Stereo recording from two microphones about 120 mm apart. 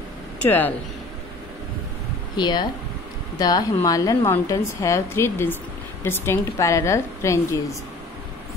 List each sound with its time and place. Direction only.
0.4 s speech: 15° left (ahead or behind)
2.3 s a woman's voice: 35° left (ahead or behind)